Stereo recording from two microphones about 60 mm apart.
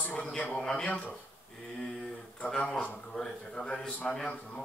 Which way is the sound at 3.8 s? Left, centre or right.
Left.